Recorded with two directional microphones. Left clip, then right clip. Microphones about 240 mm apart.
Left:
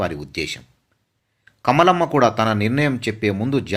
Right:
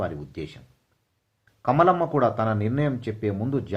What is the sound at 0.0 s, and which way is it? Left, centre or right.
Speech, centre.